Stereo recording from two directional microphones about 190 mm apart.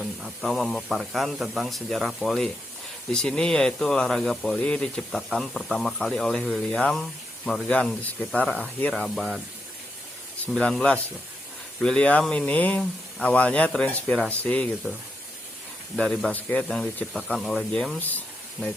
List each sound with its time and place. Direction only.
0.0 s speech: centre (ahead or behind)
10.4 s speech: 5° left (ahead or behind)
16.0 s speech: 5° left (ahead or behind)